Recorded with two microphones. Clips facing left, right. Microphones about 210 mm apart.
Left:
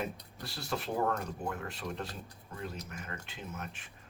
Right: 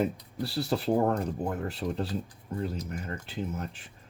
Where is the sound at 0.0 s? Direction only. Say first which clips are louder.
Right 10 dB; 35° right (ahead or behind).